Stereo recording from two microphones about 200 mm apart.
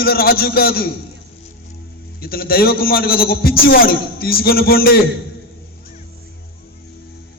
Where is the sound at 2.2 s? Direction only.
50° left (ahead or behind).